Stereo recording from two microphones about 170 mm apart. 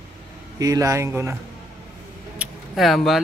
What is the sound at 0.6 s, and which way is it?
Speech, 20° right (ahead or behind).